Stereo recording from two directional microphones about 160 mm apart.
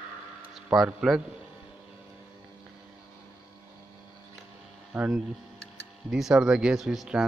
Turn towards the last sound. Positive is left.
turn(degrees=-5)  # may be behind; listen again after turning